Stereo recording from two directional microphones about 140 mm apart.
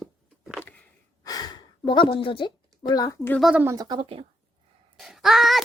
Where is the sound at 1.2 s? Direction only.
30° left (ahead or behind).